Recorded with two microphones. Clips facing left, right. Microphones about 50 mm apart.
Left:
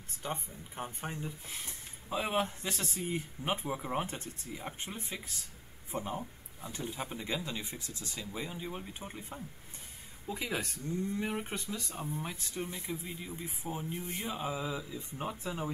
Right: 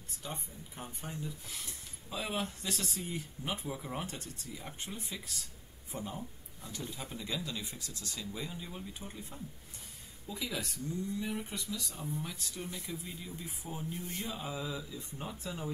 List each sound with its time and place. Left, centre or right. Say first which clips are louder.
0.2 s speech: left 5 dB; left